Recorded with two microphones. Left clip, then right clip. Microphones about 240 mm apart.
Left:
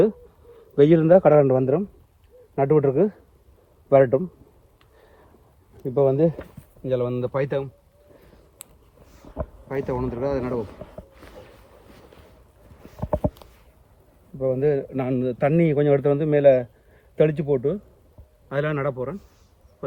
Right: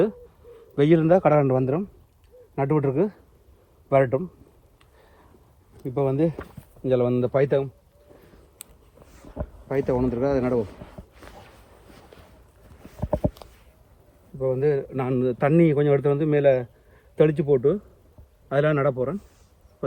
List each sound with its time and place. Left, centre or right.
0.5 s a man's voice: right
2.6 s a man's voice: centre
5.9 s speech: right
6.6 s speech: centre
9.0 s heart sounds: left
9.6 s speech: left
13.1 s a sound: centre
14.5 s a man's voice: centre
18.4 s speech: left